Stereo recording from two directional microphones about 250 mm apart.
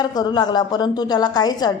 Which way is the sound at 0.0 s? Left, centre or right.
Centre.